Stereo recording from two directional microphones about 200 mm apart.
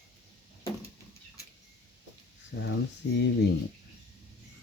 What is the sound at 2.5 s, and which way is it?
Speech, 50° left (ahead or behind).